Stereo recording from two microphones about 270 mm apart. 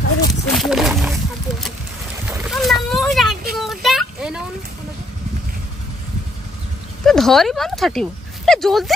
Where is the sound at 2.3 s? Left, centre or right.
Centre.